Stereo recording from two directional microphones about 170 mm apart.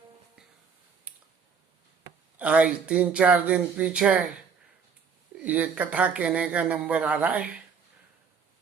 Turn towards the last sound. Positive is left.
turn(degrees=-5)  # may be behind; listen again after turning